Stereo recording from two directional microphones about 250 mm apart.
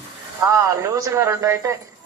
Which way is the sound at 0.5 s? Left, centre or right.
Centre.